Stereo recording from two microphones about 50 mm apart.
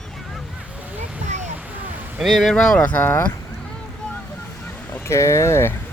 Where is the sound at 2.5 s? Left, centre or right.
Centre.